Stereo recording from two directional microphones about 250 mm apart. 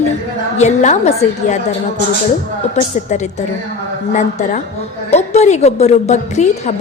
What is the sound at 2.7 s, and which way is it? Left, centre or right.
A woman's voice, left.